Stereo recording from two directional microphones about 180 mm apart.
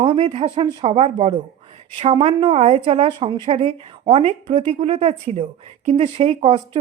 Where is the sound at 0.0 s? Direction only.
35° right (ahead or behind).